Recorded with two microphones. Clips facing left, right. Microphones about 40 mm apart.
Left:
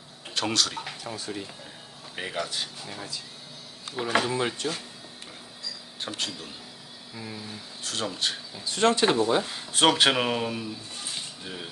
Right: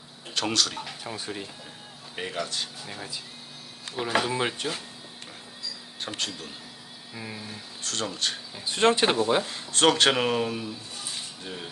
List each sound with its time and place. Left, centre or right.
0.3 s speech: centre
1.0 s speech: centre
2.1 s speech: centre
2.8 s speech: centre
4.3 s speech: centre
6.1 s speech: centre
7.1 s speech: centre
7.8 s speech: centre
8.6 s speech: right
9.4 s speech: centre